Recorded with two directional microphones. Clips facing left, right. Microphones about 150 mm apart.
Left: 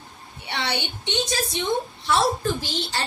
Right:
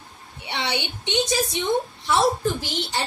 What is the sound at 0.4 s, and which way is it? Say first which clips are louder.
A woman's voice: right 1 dB; 15° right (ahead or behind).